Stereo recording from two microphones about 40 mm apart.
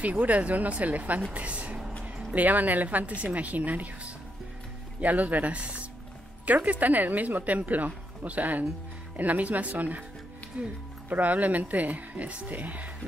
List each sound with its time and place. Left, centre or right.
0.0 s speech: right
2.3 s speech: right
11.1 s speech: right